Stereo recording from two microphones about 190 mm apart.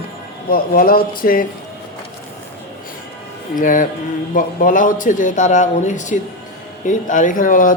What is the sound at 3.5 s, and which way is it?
A woman's voice, 45° left (ahead or behind).